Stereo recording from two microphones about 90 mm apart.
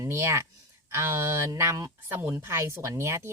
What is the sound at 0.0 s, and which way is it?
Speech, 30° right (ahead or behind).